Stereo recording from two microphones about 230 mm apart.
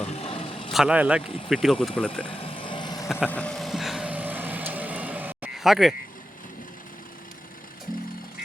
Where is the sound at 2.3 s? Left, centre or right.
Left.